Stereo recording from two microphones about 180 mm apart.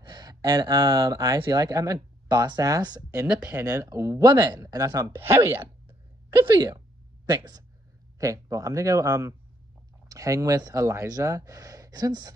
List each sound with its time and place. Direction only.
0.0 s a sound: 20° right (ahead or behind)
0.9 s speech: 15° right (ahead or behind)
7.3 s speech: 20° right (ahead or behind)